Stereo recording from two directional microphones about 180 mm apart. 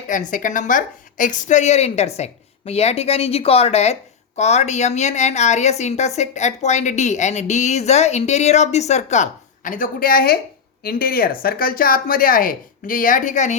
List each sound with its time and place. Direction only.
0.1 s speech: 45° left (ahead or behind)